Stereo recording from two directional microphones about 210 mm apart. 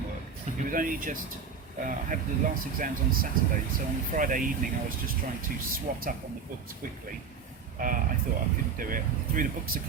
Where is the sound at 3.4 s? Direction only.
45° right (ahead or behind).